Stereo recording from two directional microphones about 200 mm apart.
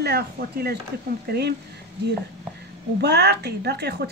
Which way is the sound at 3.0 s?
55° right (ahead or behind).